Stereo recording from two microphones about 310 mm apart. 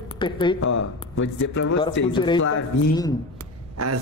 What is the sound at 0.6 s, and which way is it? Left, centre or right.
Speech, left.